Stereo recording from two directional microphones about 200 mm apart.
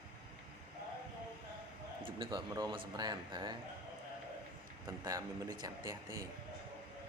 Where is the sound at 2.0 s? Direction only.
25° right (ahead or behind).